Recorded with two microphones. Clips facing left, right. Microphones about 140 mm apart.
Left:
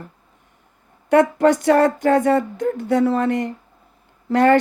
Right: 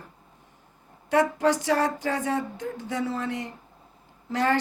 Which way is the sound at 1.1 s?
60° left (ahead or behind).